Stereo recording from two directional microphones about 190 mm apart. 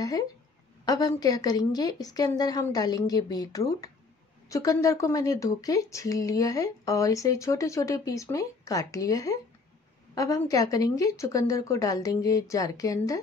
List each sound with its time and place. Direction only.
0.8 s a woman's voice: 20° left (ahead or behind)